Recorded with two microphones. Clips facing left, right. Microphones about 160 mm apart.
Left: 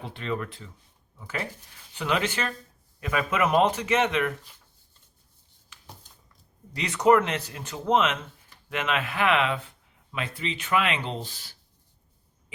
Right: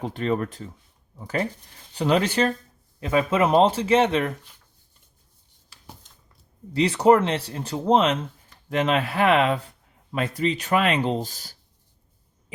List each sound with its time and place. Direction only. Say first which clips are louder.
0.0 s a man's voice: right 7 dB; 40° right (ahead or behind)
6.7 s a man's voice: right 3 dB; 30° right (ahead or behind)